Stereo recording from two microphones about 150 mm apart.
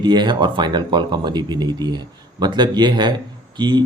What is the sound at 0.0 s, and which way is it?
Speech, 30° right (ahead or behind).